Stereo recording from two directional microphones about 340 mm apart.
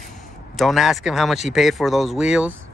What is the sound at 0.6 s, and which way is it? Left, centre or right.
Speech, centre.